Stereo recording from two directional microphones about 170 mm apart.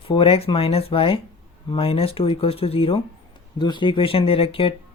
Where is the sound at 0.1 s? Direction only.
35° left (ahead or behind).